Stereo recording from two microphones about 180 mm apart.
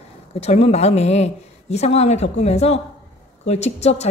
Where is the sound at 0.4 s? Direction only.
35° left (ahead or behind).